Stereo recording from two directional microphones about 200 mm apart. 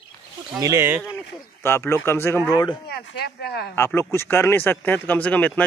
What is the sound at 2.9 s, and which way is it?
Speech, 55° left (ahead or behind).